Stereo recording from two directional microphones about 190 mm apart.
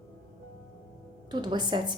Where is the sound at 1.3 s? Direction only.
20° right (ahead or behind).